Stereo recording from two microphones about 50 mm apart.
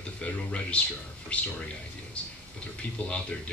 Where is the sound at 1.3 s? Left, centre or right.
Left.